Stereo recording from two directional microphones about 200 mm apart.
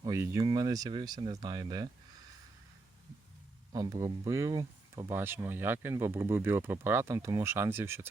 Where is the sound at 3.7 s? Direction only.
20° right (ahead or behind).